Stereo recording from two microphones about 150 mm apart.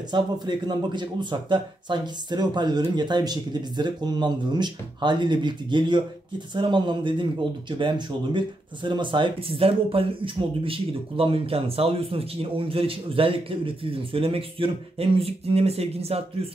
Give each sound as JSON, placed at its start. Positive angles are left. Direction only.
{"t": 0.1, "sound": "a man's voice", "side_deg": -30}